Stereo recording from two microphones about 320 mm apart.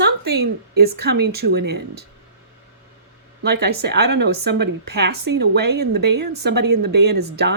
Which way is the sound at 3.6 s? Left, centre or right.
Right.